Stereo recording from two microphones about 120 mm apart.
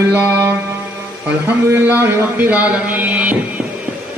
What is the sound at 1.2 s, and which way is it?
A man's voice, 15° right (ahead or behind).